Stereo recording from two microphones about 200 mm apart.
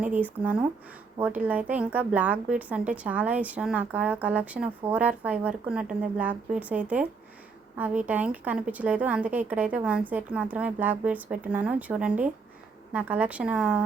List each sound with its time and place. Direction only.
0.0 s a woman's voice: 10° right (ahead or behind)